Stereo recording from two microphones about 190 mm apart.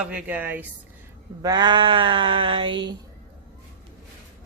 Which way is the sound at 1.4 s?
20° right (ahead or behind).